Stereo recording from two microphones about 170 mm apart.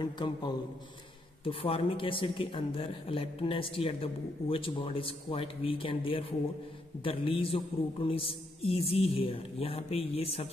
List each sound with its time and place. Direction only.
0.0 s a man's voice: 25° left (ahead or behind)